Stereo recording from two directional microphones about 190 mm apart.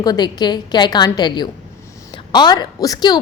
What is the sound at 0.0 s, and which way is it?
A woman's voice, 20° left (ahead or behind).